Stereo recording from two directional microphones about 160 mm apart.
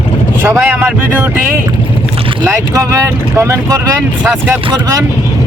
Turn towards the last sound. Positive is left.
turn(degrees=-10)  # may be behind; listen again after turning